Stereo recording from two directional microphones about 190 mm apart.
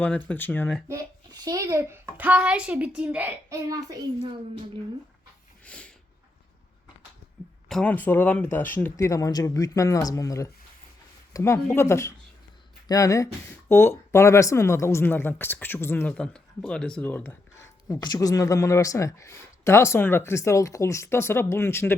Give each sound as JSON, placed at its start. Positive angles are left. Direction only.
{"t": 0.0, "sound": "speech", "side_deg": 5}
{"t": 0.9, "sound": "a child's voice", "side_deg": -20}
{"t": 5.6, "sound": "snort", "side_deg": 5}
{"t": 7.7, "sound": "speech", "side_deg": 5}